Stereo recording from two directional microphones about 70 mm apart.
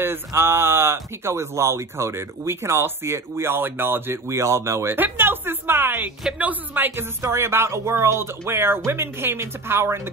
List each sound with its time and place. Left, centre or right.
0.0 s speech: right
4.3 s speech: right
4.9 s speech: right
7.2 s speech: right